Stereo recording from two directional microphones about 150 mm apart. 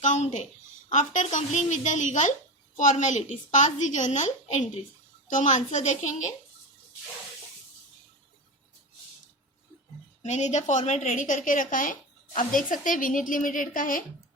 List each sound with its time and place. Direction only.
0.0 s a woman's voice: 50° left (ahead or behind)
10.2 s a woman's voice: 50° left (ahead or behind)